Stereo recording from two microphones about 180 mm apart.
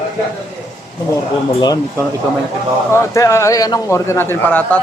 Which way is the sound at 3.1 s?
15° left (ahead or behind).